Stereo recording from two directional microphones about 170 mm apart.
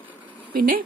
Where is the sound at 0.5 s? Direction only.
55° right (ahead or behind).